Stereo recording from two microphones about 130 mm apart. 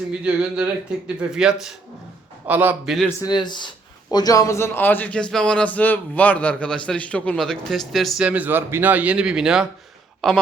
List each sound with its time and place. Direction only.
0.1 s speech: 5° right (ahead or behind)
3.2 s a man's voice: 35° left (ahead or behind); by 8.2 s centre (ahead or behind)
8.2 s speech: 10° right (ahead or behind)